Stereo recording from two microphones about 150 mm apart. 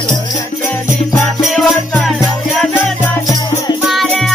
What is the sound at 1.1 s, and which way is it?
Music, centre (ahead or behind).